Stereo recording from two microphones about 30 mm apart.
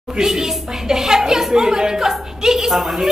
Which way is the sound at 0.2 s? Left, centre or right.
Centre.